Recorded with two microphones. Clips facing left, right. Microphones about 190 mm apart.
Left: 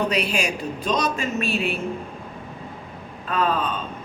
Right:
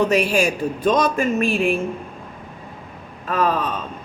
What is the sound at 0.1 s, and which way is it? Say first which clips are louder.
A woman's voice: right 6 dB; 45° right (ahead or behind).